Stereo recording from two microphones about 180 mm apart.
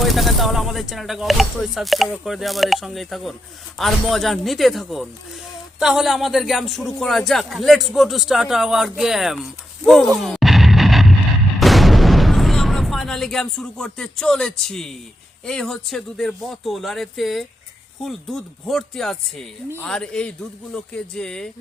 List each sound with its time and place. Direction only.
0.0 s a man's voice: centre (ahead or behind)
11.6 s artillery fire: centre (ahead or behind)
15.4 s a man's voice: 5° left (ahead or behind)